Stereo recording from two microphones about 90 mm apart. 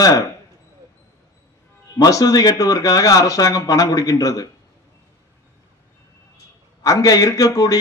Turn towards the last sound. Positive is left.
turn(degrees=40)  # may be behind; listen again after turning